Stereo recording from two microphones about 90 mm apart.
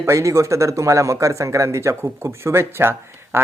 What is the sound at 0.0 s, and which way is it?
A man's voice, 35° right (ahead or behind).